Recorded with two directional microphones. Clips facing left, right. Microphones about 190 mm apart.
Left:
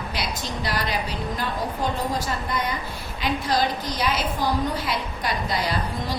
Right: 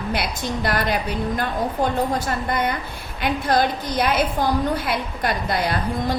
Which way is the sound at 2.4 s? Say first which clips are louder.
Right 4 dB; 60° right (ahead or behind).